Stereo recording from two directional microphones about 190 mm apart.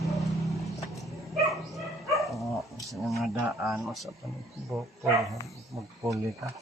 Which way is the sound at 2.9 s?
Centre (ahead or behind).